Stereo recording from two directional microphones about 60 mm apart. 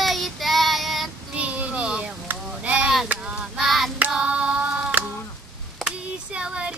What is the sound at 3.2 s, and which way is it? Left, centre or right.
Child singing, centre.